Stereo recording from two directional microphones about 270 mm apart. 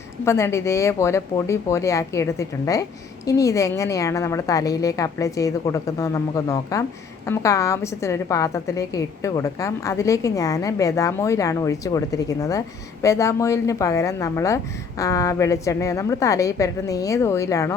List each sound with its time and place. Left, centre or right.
0.3 s a woman's voice: centre